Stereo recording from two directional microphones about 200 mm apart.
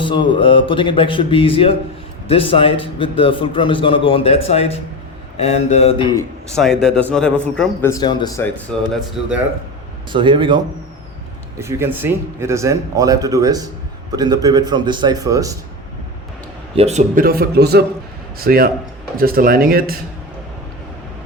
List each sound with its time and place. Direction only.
0.0 s a man's voice: 25° left (ahead or behind)
6.6 s a man's voice: centre (ahead or behind); by 8.4 s 20° left (ahead or behind)
8.7 s a man's voice: 5° left (ahead or behind)
10.1 s a man's voice: 25° right (ahead or behind)
11.6 s a man's voice: 10° right (ahead or behind)
16.7 s a man's voice: 35° right (ahead or behind); by 20.0 s 50° right (ahead or behind)